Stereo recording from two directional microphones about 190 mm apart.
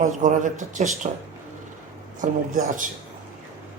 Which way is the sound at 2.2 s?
45° right (ahead or behind).